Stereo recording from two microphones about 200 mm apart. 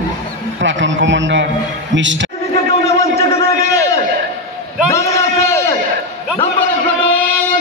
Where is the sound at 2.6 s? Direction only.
30° left (ahead or behind).